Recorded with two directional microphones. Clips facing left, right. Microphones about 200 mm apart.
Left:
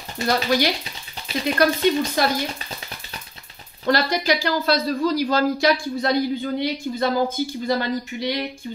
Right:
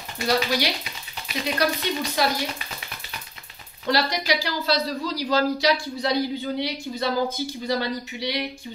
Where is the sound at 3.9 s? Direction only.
50° left (ahead or behind).